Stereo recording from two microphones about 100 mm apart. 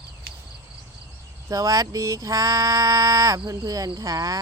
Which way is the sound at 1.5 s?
35° right (ahead or behind).